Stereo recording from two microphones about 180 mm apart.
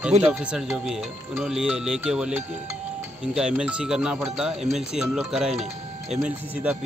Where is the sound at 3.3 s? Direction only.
5° right (ahead or behind).